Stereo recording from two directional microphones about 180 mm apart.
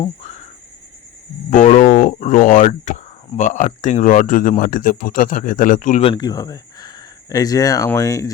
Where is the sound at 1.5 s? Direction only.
45° left (ahead or behind).